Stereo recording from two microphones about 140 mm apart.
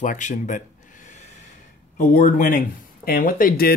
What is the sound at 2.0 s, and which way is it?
Speech, 75° left (ahead or behind).